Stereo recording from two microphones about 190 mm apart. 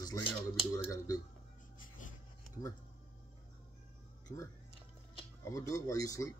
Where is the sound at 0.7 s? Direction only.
20° left (ahead or behind).